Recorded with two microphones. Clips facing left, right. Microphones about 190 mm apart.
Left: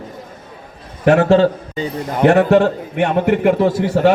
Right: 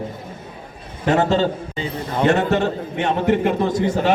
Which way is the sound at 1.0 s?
65° left (ahead or behind).